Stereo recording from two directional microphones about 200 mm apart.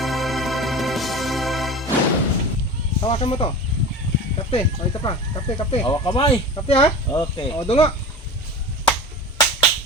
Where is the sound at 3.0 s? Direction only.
30° left (ahead or behind).